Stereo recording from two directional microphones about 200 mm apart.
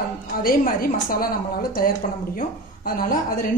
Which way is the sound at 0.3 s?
45° left (ahead or behind).